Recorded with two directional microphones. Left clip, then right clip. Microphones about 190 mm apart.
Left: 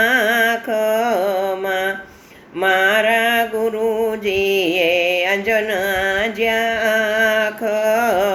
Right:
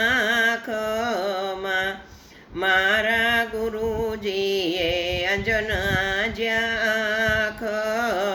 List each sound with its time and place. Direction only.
0.0 s music: 15° right (ahead or behind)
2.6 s mantra: 15° right (ahead or behind)
4.3 s music: 15° right (ahead or behind)